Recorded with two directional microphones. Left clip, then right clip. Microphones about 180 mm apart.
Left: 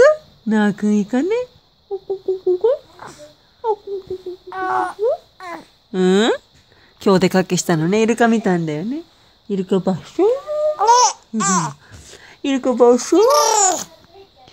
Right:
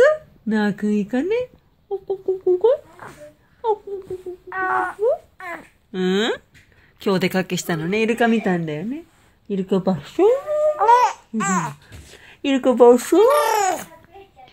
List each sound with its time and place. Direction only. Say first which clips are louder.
0.0 s speech: left 3 dB; 35° left (ahead or behind)
2.0 s a sound: left 1 dB; 15° left (ahead or behind)
4.5 s a sound: left 1 dB; 35° left (ahead or behind)
5.4 s babbling: left 1 dB; 40° left (ahead or behind)
7.0 s a woman's voice: left 6 dB; 45° left (ahead or behind)
9.9 s speech: right 2 dB; 20° left (ahead or behind)
10.8 s babbling: left 3 dB; 35° left (ahead or behind)
12.0 s a sound: left 3 dB; 40° left (ahead or behind)
12.4 s speech: even; 20° left (ahead or behind)
13.3 s babbling: left 3 dB; 55° left (ahead or behind)
13.6 s babbling: left 3 dB; 30° left (ahead or behind)